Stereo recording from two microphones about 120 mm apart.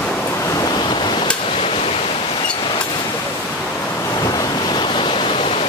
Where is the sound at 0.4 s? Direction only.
30° left (ahead or behind).